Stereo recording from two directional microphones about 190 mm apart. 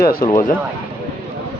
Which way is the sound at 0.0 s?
50° left (ahead or behind).